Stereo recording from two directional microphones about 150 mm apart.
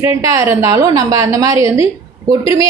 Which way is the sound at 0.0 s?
20° right (ahead or behind).